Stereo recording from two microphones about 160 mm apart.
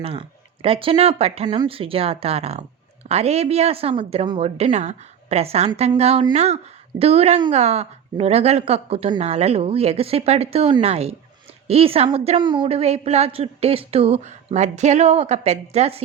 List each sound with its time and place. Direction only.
0.0 s a woman's voice: 35° right (ahead or behind)
12.6 s a woman's voice: 40° right (ahead or behind)